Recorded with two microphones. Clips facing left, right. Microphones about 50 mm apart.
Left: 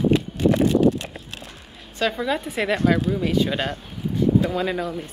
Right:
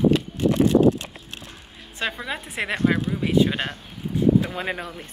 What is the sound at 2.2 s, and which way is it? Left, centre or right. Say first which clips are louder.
A woman's voice: left 5 dB; centre.